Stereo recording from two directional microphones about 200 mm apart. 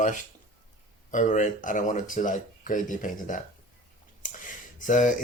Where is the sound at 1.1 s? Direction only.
40° left (ahead or behind).